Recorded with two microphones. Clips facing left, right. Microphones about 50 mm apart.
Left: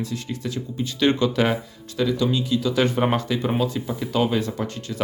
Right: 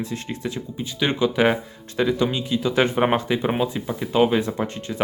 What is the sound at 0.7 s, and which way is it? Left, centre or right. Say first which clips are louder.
Speech: left 3 dB; centre.